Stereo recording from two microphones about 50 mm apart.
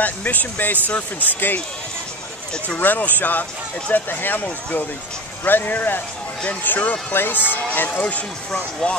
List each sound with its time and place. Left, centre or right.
0.0 s speech: left
2.8 s speech: left